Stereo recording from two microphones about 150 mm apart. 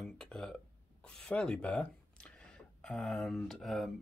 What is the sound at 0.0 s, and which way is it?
Burping, 5° left (ahead or behind).